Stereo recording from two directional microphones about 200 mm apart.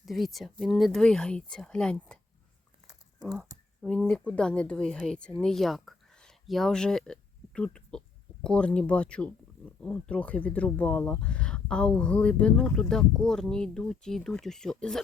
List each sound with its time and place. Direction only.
0.0 s speech: centre (ahead or behind)
2.8 s a sound: 20° right (ahead or behind)
3.8 s speech: 5° left (ahead or behind)